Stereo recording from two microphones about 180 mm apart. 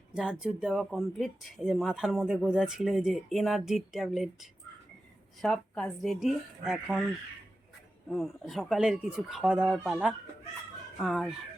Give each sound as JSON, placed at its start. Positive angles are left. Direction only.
{"t": 0.1, "sound": "speech", "side_deg": -5}
{"t": 8.1, "sound": "speech", "side_deg": 0}